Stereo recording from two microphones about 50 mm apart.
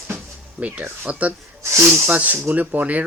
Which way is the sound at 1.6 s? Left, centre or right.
Right.